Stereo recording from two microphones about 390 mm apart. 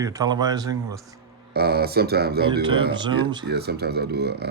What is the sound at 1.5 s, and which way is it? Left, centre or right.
Speech, right.